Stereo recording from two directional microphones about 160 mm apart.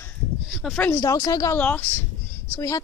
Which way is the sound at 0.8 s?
15° left (ahead or behind).